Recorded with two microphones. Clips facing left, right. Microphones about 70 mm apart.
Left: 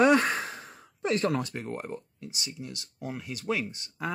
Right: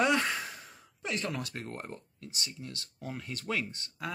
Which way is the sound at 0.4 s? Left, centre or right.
Left.